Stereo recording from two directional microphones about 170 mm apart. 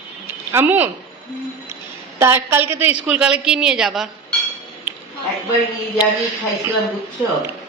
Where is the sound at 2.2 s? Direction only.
15° right (ahead or behind).